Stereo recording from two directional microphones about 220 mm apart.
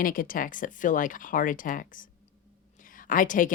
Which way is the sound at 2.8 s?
40° left (ahead or behind).